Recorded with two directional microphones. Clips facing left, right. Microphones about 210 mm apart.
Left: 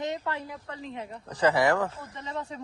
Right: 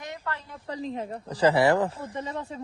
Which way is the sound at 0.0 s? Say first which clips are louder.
Left 4 dB; 20° left (ahead or behind).